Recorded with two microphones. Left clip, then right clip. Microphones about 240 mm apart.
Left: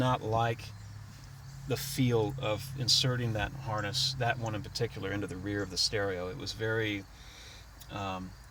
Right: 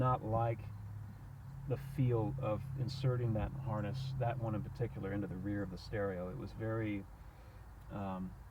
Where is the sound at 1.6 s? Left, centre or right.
Left.